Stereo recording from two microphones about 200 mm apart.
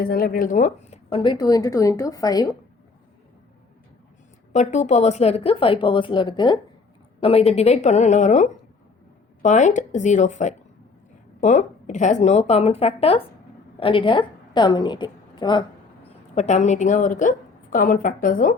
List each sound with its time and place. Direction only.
0.0 s a woman's voice: 50° left (ahead or behind); by 2.5 s 20° left (ahead or behind)
4.5 s a woman's voice: 35° left (ahead or behind)
16.3 s a woman's voice: 35° left (ahead or behind)